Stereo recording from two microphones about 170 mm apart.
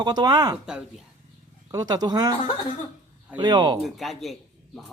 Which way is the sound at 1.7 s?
20° right (ahead or behind).